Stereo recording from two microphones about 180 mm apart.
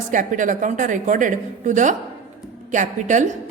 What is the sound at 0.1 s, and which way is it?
A woman's voice, 45° right (ahead or behind).